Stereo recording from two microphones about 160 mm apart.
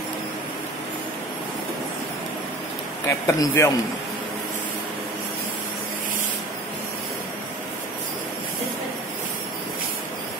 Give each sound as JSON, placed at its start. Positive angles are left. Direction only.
{"t": 3.1, "sound": "speech", "side_deg": 20}